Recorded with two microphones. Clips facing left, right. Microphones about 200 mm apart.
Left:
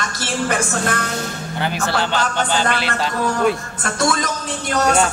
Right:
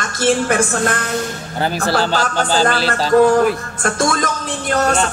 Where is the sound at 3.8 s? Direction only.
50° right (ahead or behind).